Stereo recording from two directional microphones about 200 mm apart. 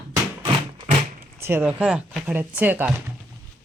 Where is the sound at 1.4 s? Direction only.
10° right (ahead or behind).